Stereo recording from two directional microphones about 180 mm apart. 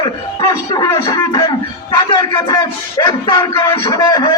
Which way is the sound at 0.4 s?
20° left (ahead or behind).